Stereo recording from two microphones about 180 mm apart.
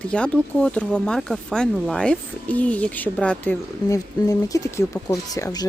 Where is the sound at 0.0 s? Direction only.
5° left (ahead or behind).